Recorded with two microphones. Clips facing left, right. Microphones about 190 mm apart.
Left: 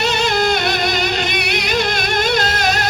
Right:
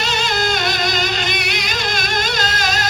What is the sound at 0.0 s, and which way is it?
Music, 60° left (ahead or behind).